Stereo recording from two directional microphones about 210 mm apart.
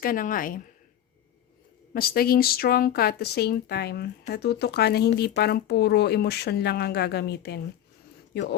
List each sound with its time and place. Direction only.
0.0 s speech: 40° left (ahead or behind)
1.9 s speech: 45° left (ahead or behind)